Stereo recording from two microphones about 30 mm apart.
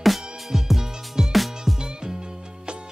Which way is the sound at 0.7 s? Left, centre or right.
Centre.